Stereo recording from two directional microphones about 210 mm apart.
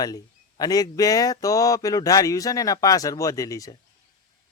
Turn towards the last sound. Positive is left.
turn(degrees=15)  # may be behind; listen again after turning